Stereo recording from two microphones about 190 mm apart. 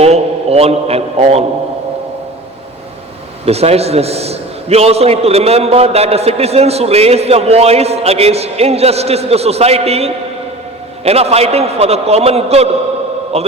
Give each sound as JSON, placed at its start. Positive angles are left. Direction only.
{"t": 0.0, "sound": "a man's voice", "side_deg": -35}
{"t": 3.4, "sound": "a man's voice", "side_deg": -35}